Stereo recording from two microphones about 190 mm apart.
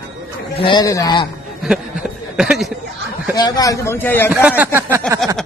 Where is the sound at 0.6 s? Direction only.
25° left (ahead or behind).